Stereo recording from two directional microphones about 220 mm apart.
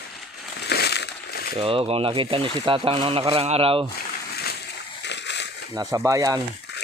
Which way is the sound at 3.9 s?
45° left (ahead or behind).